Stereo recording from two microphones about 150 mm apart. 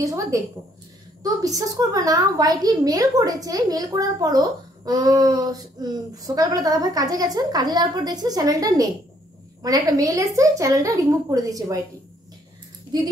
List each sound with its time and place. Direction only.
0.0 s a woman's voice: 20° right (ahead or behind)